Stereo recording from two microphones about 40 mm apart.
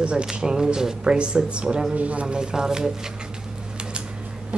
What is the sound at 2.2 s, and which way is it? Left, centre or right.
Speech, right.